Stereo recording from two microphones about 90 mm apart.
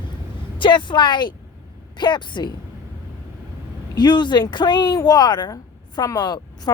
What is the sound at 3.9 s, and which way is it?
Speech, 55° left (ahead or behind).